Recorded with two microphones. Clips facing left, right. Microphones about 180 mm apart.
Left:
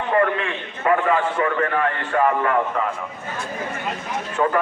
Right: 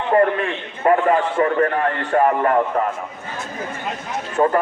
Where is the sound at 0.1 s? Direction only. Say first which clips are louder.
Right 4 dB; 40° right (ahead or behind).